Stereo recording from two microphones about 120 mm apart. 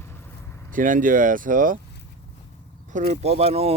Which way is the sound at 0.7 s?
90° right.